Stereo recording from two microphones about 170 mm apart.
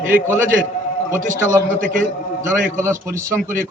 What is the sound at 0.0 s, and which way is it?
Speech, 55° right (ahead or behind).